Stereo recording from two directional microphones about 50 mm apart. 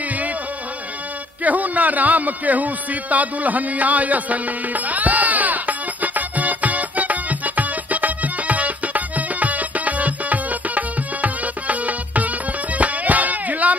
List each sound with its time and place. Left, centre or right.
1.4 s music: right